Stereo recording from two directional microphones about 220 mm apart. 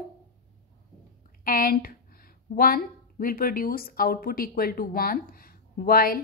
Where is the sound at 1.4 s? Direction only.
40° left (ahead or behind).